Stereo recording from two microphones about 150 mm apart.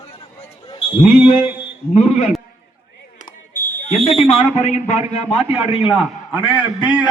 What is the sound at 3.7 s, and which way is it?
Fire alarm, 55° left (ahead or behind).